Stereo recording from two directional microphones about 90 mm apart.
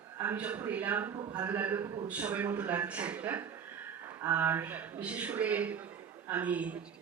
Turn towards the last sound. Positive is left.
turn(degrees=-15)  # may be behind; listen again after turning